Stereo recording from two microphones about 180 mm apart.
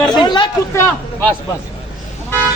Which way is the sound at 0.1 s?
25° left (ahead or behind).